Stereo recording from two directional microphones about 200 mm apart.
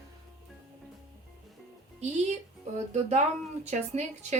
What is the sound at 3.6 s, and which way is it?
Speech, 35° right (ahead or behind).